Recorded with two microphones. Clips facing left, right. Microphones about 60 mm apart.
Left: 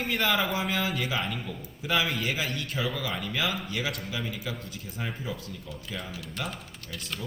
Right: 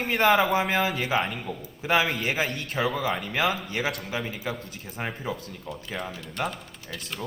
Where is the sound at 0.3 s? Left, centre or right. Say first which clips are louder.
Right 5 dB; right.